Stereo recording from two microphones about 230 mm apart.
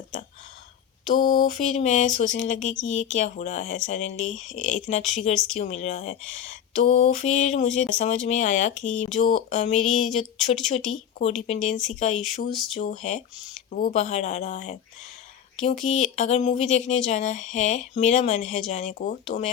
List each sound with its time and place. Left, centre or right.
1.1 s speech: left